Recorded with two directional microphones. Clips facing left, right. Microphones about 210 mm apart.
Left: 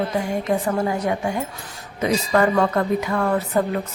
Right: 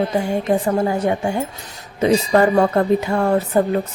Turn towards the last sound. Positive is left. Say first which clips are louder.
# right 4 dB
turn(degrees=-30)  # may be behind; listen again after turning